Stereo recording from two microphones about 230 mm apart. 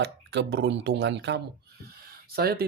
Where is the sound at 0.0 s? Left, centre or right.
Right.